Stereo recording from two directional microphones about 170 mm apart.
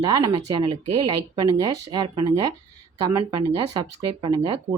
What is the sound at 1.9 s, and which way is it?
Speech, 25° right (ahead or behind).